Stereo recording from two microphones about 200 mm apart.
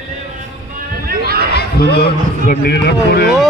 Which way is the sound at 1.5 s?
55° left (ahead or behind).